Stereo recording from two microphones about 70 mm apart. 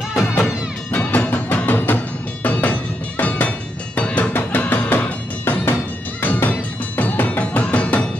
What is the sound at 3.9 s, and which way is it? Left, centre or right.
Music, left.